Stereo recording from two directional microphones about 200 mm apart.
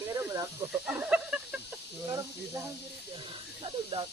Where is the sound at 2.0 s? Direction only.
15° right (ahead or behind).